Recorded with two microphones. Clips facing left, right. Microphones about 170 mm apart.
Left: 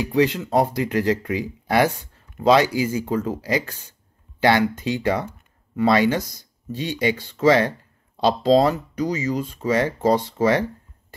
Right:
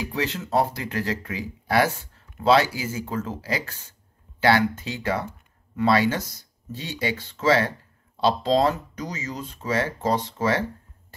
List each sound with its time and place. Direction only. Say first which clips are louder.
0.0 s speech: left 8 dB; 15° left (ahead or behind)